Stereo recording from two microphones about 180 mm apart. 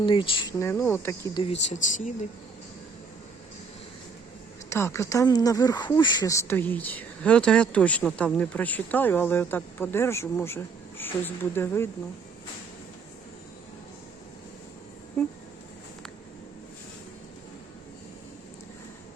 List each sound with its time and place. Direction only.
0.0 s speech: 25° left (ahead or behind)
0.6 s speech: 15° left (ahead or behind)
1.4 s speech: 35° left (ahead or behind)
4.7 s speech: 15° left (ahead or behind)